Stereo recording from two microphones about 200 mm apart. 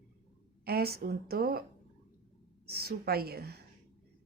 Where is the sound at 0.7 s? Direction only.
50° right (ahead or behind).